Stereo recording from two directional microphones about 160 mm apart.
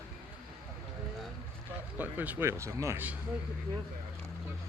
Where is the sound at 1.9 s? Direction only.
10° right (ahead or behind).